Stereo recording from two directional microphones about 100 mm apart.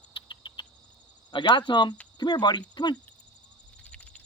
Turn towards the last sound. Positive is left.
turn(degrees=10)  # may be behind; listen again after turning